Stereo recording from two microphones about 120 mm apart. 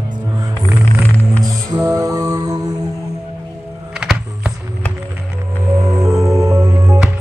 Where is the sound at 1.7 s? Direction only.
25° right (ahead or behind).